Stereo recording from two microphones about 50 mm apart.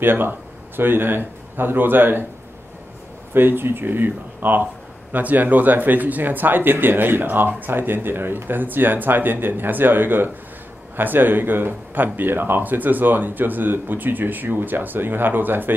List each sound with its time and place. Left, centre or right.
0.0 s a man's voice: right
3.3 s speech: right